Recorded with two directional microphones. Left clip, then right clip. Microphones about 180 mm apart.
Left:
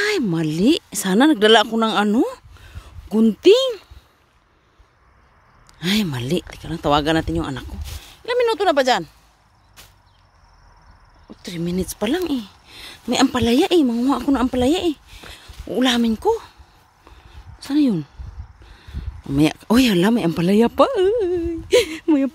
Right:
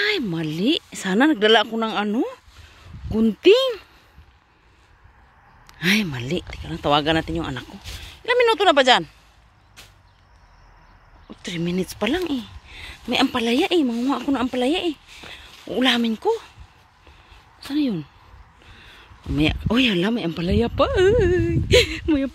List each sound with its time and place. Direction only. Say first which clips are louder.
0.0 s speech: left 2 dB; 35° left (ahead or behind); by 3.8 s 15° left (ahead or behind)
5.7 s a sound: right 3 dB; 5° left (ahead or behind)
5.9 s speech: left 2 dB; 25° left (ahead or behind)
7.8 s speech: right 2 dB; 5° left (ahead or behind)
11.2 s speech: even; 5° left (ahead or behind); by 16.5 s 30° left (ahead or behind)
17.6 s speech: left 5 dB; 45° left (ahead or behind)
18.8 s speech: left 1 dB; 30° left (ahead or behind)
20.9 s speech: right 1 dB; 10° left (ahead or behind)
21.7 s speech: left 1 dB; 20° left (ahead or behind)